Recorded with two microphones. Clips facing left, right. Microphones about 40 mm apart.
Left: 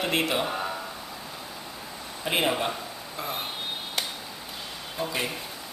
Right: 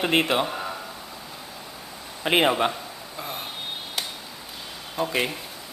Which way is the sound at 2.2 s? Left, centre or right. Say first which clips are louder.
Right 5 dB; right.